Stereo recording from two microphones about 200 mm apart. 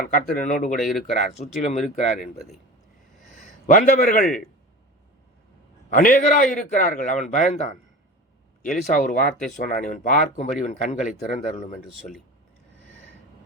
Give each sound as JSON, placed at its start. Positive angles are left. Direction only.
{"t": 0.1, "sound": "speech", "side_deg": 40}
{"t": 0.8, "sound": "speech", "side_deg": 0}
{"t": 1.1, "sound": "speech", "side_deg": 40}
{"t": 3.3, "sound": "a man's voice", "side_deg": 40}
{"t": 5.9, "sound": "speech", "side_deg": 40}